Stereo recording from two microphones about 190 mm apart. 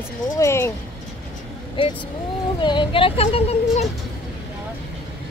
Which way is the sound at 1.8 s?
30° left (ahead or behind).